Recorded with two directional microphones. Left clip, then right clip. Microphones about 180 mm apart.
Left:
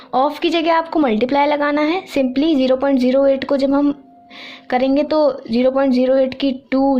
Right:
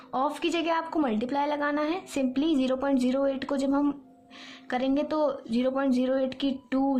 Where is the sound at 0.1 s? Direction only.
25° left (ahead or behind).